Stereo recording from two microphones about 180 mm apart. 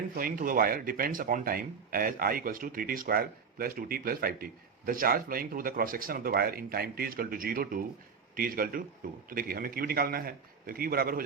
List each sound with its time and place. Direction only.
0.2 s a man's voice: 50° right (ahead or behind)